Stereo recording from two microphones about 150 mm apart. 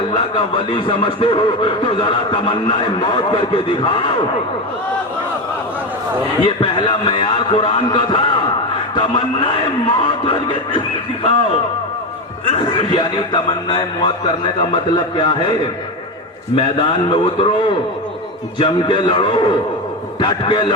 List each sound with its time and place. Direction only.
0.1 s speech: 30° left (ahead or behind)
6.4 s speech: 30° left (ahead or behind)
12.5 s speech: 30° left (ahead or behind)
16.6 s a man's voice: 30° left (ahead or behind)